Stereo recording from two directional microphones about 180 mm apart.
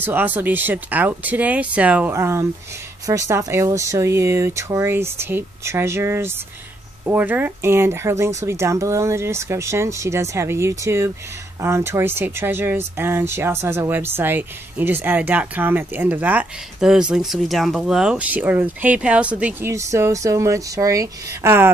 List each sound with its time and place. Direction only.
0.0 s speech: 10° right (ahead or behind)